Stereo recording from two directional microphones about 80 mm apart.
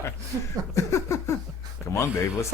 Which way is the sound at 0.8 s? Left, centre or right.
Left.